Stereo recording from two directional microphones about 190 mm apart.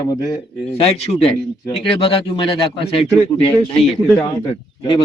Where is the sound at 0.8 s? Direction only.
30° left (ahead or behind).